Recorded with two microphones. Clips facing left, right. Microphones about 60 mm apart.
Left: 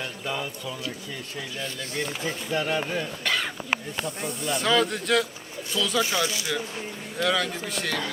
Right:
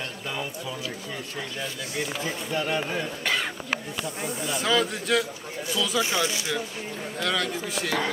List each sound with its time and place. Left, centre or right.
0.0 s a sound: centre
1.4 s speech: centre
6.1 s speech: right
7.2 s speech: centre